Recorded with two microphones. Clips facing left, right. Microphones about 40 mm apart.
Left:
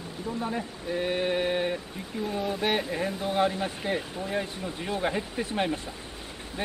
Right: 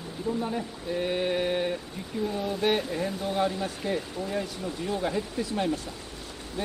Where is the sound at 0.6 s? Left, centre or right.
Centre.